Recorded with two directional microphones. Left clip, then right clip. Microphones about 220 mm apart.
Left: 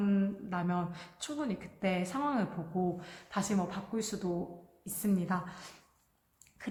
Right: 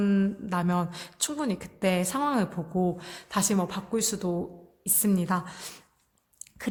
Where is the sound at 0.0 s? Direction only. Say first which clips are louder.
Right 6 dB; 50° right (ahead or behind).